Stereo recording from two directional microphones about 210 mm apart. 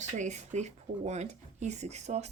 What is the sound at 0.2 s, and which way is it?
Speech, 35° right (ahead or behind).